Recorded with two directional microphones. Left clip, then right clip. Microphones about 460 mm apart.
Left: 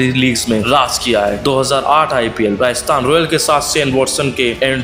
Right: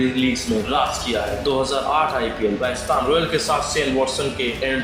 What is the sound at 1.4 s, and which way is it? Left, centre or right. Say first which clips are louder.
Speech: left 7 dB; left.